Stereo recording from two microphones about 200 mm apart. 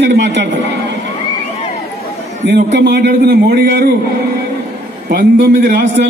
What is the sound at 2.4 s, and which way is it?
A man's voice, 60° right (ahead or behind).